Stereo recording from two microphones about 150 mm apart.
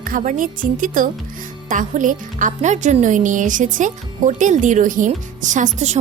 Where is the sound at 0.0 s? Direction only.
60° right (ahead or behind).